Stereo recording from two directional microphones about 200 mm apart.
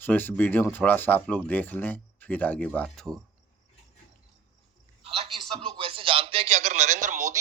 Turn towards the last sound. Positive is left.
turn(degrees=-35)  # may be behind; listen again after turning